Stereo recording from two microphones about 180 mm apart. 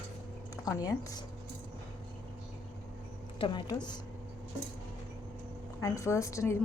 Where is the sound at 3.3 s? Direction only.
25° left (ahead or behind).